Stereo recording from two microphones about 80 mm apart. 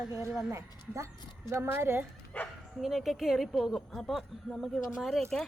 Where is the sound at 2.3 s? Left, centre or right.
Centre.